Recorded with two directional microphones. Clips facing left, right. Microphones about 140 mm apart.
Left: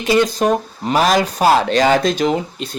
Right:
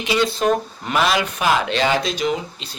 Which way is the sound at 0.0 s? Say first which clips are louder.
Left 4 dB; 45° left (ahead or behind).